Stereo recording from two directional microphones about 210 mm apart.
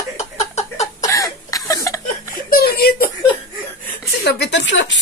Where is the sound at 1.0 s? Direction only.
15° left (ahead or behind).